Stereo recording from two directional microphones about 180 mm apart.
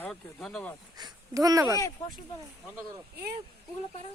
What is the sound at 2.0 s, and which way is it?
Speech, 25° left (ahead or behind).